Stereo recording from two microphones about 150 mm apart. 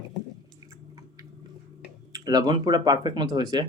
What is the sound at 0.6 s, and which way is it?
Chewing, 20° right (ahead or behind).